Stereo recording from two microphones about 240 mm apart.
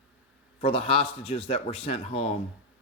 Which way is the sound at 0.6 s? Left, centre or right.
Left.